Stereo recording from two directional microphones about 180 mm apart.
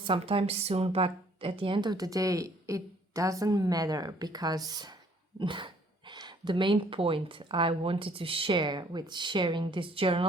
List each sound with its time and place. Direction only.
0.0 s a woman's voice: 30° right (ahead or behind)